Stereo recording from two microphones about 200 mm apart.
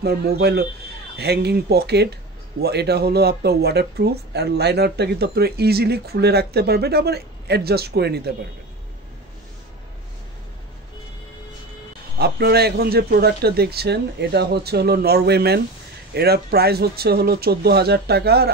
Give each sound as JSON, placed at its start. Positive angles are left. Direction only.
{"t": 0.0, "sound": "speech", "side_deg": -50}
{"t": 12.2, "sound": "speech", "side_deg": -50}